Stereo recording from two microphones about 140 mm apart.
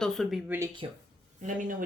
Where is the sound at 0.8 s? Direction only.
40° right (ahead or behind).